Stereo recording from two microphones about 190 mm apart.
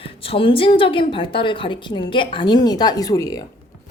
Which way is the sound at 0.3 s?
30° left (ahead or behind).